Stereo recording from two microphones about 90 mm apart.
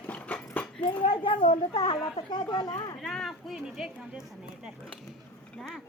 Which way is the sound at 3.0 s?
5° left (ahead or behind).